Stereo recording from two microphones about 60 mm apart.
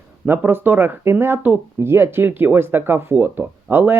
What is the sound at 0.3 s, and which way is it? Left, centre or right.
Speech, right.